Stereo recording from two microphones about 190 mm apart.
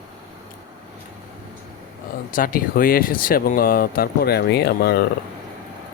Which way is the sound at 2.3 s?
45° left (ahead or behind).